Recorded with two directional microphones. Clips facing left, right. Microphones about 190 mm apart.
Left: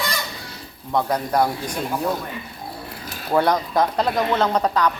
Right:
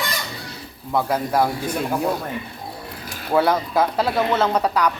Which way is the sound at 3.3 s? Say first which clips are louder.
Even; 5° right (ahead or behind).